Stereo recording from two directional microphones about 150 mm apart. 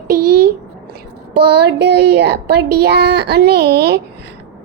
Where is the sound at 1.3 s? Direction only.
90° right.